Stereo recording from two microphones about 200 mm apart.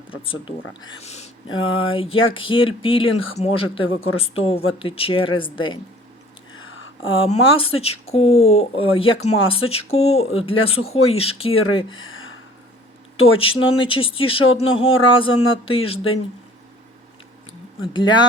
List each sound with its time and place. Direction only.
0.1 s speech: 25° left (ahead or behind)
6.7 s a sound: 75° left (ahead or behind)
7.3 s speech: 25° left (ahead or behind)
13.3 s speech: 25° left (ahead or behind)
17.9 s speech: 20° left (ahead or behind)